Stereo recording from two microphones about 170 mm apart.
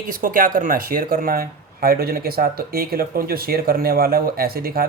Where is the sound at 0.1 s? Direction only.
55° right (ahead or behind).